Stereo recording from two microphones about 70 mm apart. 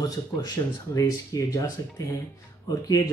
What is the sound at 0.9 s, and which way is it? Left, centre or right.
Speech, left.